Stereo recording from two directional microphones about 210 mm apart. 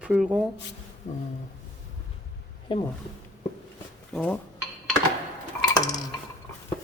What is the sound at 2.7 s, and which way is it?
Speech, 25° left (ahead or behind).